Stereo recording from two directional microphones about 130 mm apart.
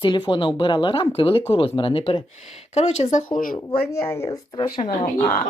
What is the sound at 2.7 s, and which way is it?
Speech, 55° left (ahead or behind).